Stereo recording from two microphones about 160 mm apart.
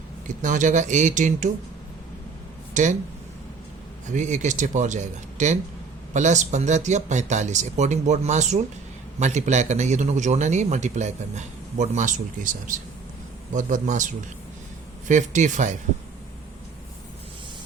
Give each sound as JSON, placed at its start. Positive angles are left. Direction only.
{"t": 0.3, "sound": "a man's voice", "side_deg": -50}
{"t": 2.8, "sound": "a man's voice", "side_deg": -50}
{"t": 4.1, "sound": "a man's voice", "side_deg": -50}